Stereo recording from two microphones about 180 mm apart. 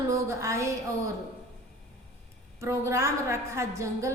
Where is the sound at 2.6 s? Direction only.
15° right (ahead or behind).